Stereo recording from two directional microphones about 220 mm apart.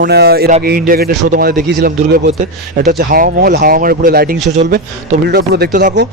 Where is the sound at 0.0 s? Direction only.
45° right (ahead or behind).